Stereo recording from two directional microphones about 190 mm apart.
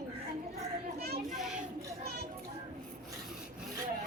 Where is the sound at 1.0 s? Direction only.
55° right (ahead or behind).